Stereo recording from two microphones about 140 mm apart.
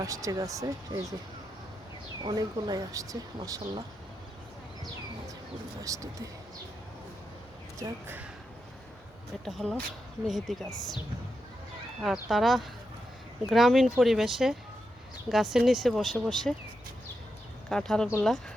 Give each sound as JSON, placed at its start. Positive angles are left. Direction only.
{"t": 0.0, "sound": "speech", "side_deg": -25}
{"t": 2.2, "sound": "speech", "side_deg": -30}
{"t": 5.8, "sound": "speech", "side_deg": -25}
{"t": 7.8, "sound": "speech", "side_deg": -15}
{"t": 9.4, "sound": "speech", "side_deg": 0}
{"t": 12.0, "sound": "speech", "side_deg": 0}
{"t": 17.7, "sound": "speech", "side_deg": 5}